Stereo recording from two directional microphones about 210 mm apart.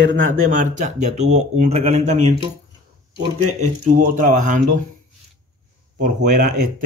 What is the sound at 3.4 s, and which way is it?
Speech, 35° right (ahead or behind).